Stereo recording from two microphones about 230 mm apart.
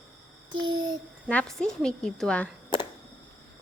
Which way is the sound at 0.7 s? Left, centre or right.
Centre.